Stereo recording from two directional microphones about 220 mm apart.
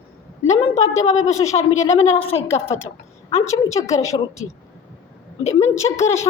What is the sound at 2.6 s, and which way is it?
A woman's voice, 10° left (ahead or behind).